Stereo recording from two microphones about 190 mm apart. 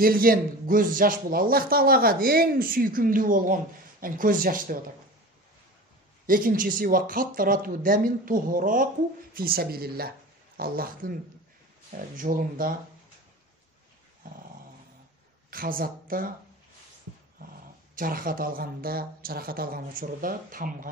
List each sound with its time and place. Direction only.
0.0 s speech: 50° right (ahead or behind)
6.2 s speech: 45° right (ahead or behind)
12.2 s speech: 45° right (ahead or behind)
14.2 s dog: 50° right (ahead or behind)
15.5 s speech: 50° right (ahead or behind)
17.9 s speech: 45° right (ahead or behind)